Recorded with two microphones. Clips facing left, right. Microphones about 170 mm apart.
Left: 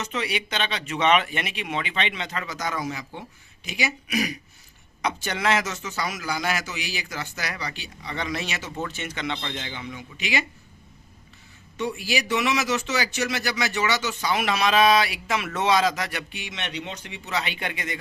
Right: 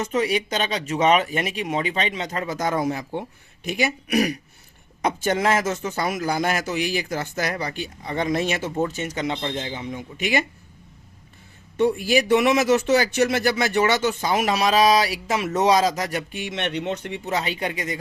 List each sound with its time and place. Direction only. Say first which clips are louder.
0.0 s speech: right 7 dB; 45° right (ahead or behind)
5.0 s a man's voice: right 4 dB; 45° right (ahead or behind)
11.8 s a man's voice: right 8 dB; 55° right (ahead or behind)
14.3 s speech: right 1 dB; 40° right (ahead or behind)